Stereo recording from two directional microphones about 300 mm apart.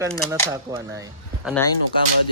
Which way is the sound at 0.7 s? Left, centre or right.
Centre.